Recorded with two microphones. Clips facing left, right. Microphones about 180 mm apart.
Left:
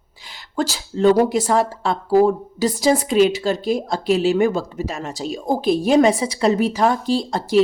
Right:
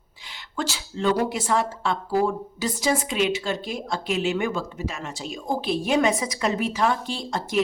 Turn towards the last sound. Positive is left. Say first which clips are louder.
# left 9 dB
turn(degrees=35)  # may be behind; listen again after turning